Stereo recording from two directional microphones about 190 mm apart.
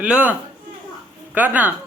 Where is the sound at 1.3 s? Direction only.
10° right (ahead or behind).